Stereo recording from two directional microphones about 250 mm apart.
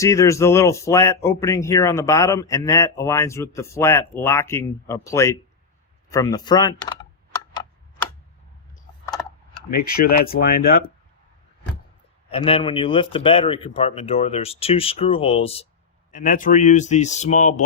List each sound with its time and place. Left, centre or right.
0.0 s speech: centre
9.7 s speech: left
12.3 s speech: left